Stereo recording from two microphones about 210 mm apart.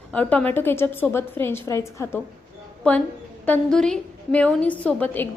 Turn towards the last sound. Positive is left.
turn(degrees=5)  # may be behind; listen again after turning